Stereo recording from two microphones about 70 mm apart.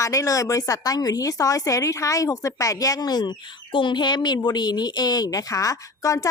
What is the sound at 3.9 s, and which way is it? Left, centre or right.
Speech, left.